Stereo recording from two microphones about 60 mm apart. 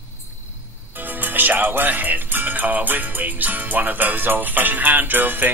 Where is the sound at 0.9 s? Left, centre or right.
Right.